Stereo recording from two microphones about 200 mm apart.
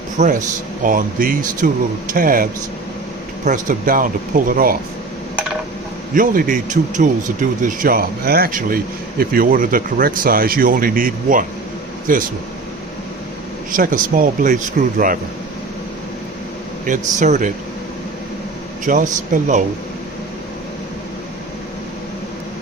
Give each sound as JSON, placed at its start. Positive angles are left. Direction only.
{"t": 0.2, "sound": "speech", "side_deg": -40}
{"t": 6.1, "sound": "speech", "side_deg": -45}
{"t": 13.7, "sound": "speech", "side_deg": -45}
{"t": 16.8, "sound": "speech", "side_deg": -40}
{"t": 18.9, "sound": "speech", "side_deg": -40}